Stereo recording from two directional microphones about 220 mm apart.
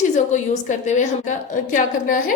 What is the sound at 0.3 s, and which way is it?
A woman's voice, 35° left (ahead or behind).